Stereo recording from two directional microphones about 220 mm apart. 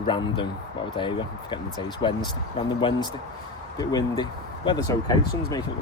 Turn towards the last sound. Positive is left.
turn(degrees=15)  # may be behind; listen again after turning